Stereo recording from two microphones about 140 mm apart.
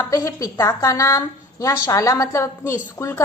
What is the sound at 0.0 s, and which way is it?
A woman's voice, 25° left (ahead or behind).